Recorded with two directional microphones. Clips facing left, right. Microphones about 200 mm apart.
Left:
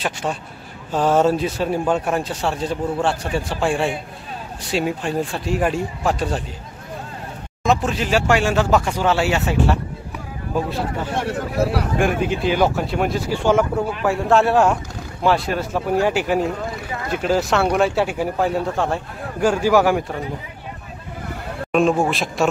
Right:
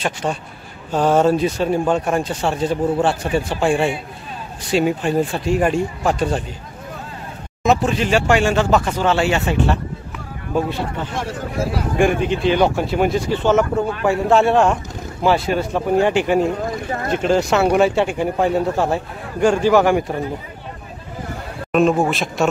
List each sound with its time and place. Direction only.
0.0 s speech: centre (ahead or behind)
7.6 s speech: centre (ahead or behind)
11.1 s speech: 65° left (ahead or behind)
12.0 s speech: 5° left (ahead or behind)
13.3 s speech: 10° left (ahead or behind)
21.7 s speech: centre (ahead or behind)